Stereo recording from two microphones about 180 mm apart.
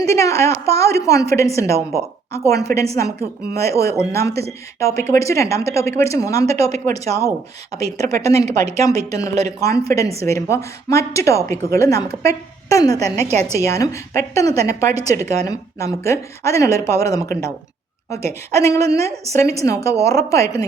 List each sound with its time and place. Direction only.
0.0 s a woman's voice: 15° left (ahead or behind)
6.7 s speech: 40° right (ahead or behind)
7.8 s a woman's voice: 20° left (ahead or behind)
13.2 s speech: 35° right (ahead or behind)
13.6 s a woman's voice: 15° left (ahead or behind)